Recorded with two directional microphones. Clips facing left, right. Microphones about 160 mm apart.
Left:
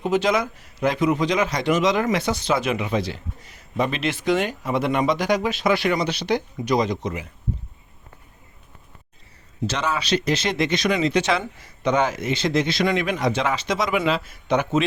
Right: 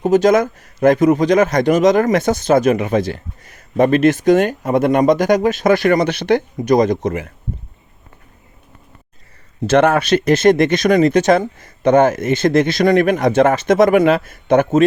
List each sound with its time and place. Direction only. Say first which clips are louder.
0.0 s a man's voice: right 8 dB; 45° right (ahead or behind)
9.6 s a man's voice: right 12 dB; 55° right (ahead or behind)